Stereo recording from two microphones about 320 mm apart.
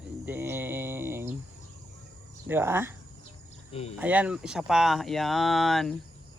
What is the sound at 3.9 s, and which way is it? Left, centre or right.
Speech, centre.